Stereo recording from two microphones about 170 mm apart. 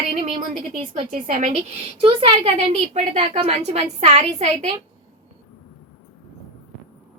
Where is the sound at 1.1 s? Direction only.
45° right (ahead or behind).